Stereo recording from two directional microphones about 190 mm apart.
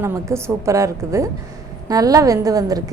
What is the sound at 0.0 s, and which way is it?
A woman's voice, 15° right (ahead or behind).